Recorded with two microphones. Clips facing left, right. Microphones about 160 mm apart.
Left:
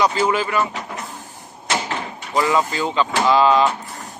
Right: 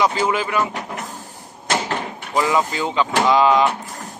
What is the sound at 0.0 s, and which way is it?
Speech, 15° right (ahead or behind).